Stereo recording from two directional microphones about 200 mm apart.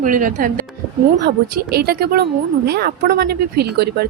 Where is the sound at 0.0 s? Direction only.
40° right (ahead or behind).